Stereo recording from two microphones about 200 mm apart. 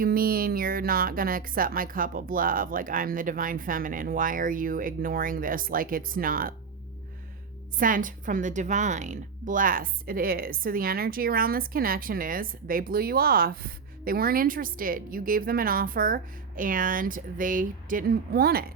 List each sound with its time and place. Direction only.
0.0 s a woman's voice: 45° right (ahead or behind)
7.8 s a woman's voice: 45° right (ahead or behind)